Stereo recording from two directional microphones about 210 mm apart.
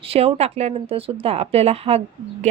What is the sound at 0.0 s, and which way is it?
A woman's voice, 25° right (ahead or behind).